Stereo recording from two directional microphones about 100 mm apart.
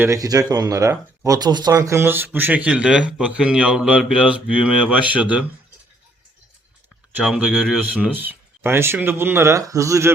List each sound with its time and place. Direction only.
0.0 s speech: 35° right (ahead or behind); by 5.5 s 10° right (ahead or behind)
7.3 s speech: centre (ahead or behind)
7.9 s speech: 15° right (ahead or behind)